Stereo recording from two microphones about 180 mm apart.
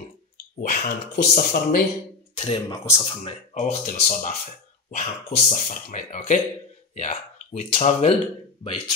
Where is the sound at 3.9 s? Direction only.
40° left (ahead or behind).